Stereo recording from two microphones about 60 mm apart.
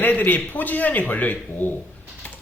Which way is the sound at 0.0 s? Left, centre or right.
Left.